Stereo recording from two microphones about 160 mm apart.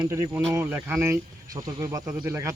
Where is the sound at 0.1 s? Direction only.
15° right (ahead or behind).